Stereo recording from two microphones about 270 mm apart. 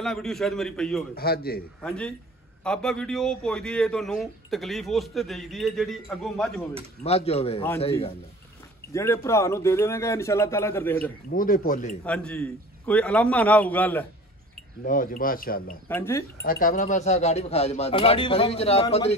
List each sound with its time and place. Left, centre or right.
0.0 s a man's voice: centre
1.1 s speech: left
1.8 s a man's voice: centre
7.0 s speech: left
8.9 s speech: centre
11.2 s speech: left
12.0 s a man's voice: centre
14.9 s speech: left
15.9 s speech: centre
16.4 s speech: left